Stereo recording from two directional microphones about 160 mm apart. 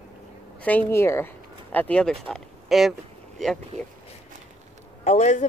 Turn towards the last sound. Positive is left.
turn(degrees=50)  # may be behind; listen again after turning